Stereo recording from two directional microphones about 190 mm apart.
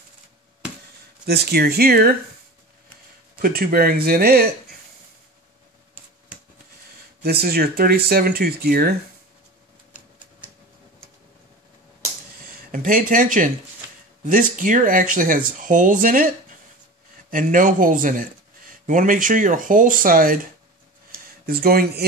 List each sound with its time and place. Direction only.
1.2 s speech: 60° right (ahead or behind)
3.3 s speech: 50° right (ahead or behind)
7.2 s speech: 55° right (ahead or behind)
9.9 s typewriter: 10° right (ahead or behind)
12.7 s speech: 45° right (ahead or behind)
21.5 s speech: 55° right (ahead or behind)